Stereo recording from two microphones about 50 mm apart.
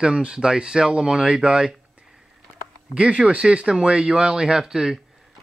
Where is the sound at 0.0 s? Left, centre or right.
Centre.